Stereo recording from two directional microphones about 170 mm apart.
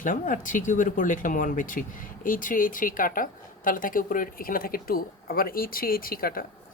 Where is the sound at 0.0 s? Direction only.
50° left (ahead or behind).